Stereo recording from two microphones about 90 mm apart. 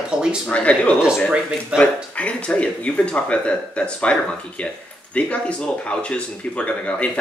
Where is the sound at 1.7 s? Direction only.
10° right (ahead or behind).